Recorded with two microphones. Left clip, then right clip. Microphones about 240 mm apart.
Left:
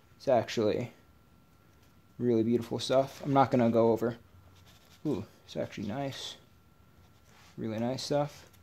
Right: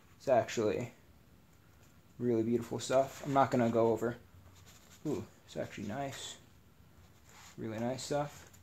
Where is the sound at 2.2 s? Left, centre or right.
Left.